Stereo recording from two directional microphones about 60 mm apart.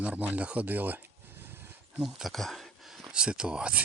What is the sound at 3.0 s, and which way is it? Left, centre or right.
Speech, centre.